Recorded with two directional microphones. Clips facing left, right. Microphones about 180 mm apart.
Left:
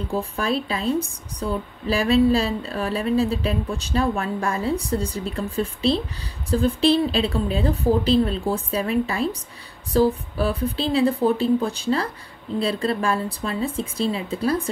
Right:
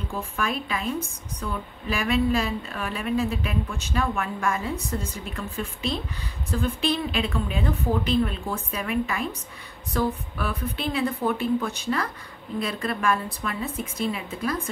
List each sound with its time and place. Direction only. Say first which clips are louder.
0.1 s a woman's voice: left 5 dB; 35° left (ahead or behind)